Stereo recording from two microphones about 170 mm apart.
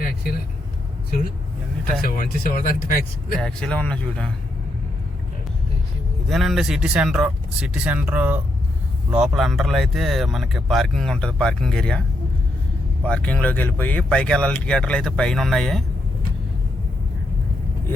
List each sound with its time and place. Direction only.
2.0 s speech: 55° left (ahead or behind)
3.3 s speech: 5° left (ahead or behind)
6.2 s speech: centre (ahead or behind)